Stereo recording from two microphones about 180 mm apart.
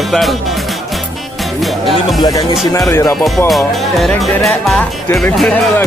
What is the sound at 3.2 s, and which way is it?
Speech, centre (ahead or behind).